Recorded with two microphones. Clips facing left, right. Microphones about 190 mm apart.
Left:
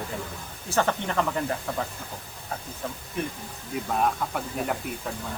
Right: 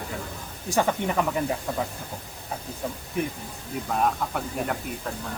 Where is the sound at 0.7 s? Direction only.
10° right (ahead or behind).